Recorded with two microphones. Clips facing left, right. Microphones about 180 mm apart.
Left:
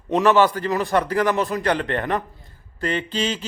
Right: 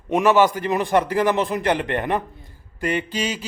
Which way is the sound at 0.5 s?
15° right (ahead or behind).